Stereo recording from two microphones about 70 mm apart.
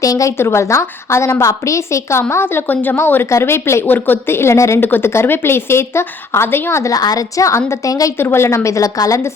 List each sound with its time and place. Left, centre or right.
0.0 s a sound: left
0.3 s a woman's voice: left
3.8 s speech: left
4.8 s speech: left
6.9 s a woman's voice: left
8.2 s a woman's voice: left